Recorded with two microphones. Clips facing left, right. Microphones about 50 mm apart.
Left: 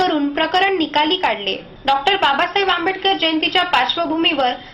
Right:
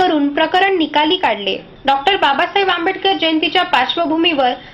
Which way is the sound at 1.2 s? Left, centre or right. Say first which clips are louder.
Right 3 dB; centre.